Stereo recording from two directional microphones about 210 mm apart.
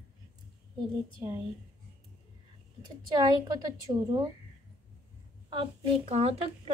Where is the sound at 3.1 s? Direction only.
20° right (ahead or behind).